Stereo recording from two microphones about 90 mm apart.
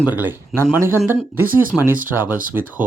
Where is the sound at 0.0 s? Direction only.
20° right (ahead or behind).